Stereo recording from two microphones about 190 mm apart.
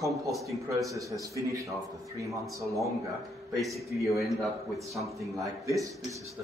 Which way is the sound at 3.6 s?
Centre (ahead or behind).